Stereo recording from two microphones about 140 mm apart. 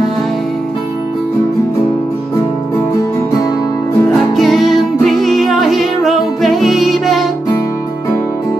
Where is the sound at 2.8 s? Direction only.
25° left (ahead or behind).